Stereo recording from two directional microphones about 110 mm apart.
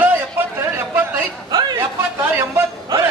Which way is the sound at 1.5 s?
35° right (ahead or behind).